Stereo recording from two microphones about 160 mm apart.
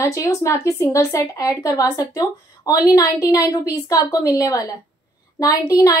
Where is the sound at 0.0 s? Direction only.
20° left (ahead or behind).